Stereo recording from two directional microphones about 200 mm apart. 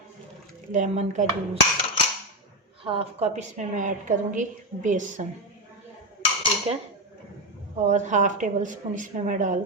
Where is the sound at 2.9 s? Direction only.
30° right (ahead or behind).